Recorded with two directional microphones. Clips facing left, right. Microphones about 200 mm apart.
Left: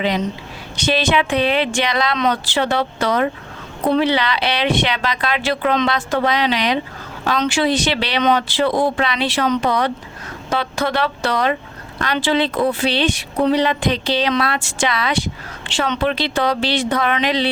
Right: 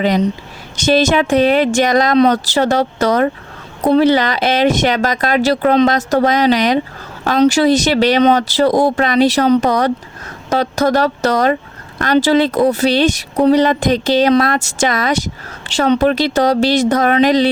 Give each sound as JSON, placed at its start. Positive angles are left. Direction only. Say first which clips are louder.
{"t": 0.0, "sound": "speech", "louder": "right 6 dB", "side_deg": -45}